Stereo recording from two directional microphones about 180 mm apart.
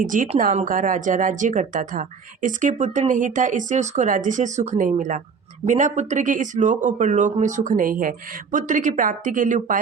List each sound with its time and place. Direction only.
0.0 s a woman's voice: 45° right (ahead or behind)